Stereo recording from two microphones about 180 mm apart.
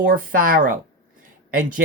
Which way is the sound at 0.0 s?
50° right (ahead or behind).